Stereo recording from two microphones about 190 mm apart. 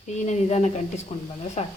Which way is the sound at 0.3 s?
35° left (ahead or behind).